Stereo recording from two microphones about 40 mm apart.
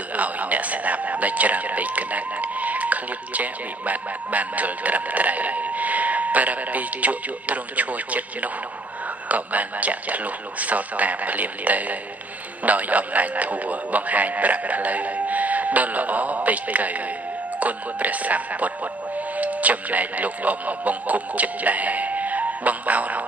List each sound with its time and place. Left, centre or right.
0.1 s speech: right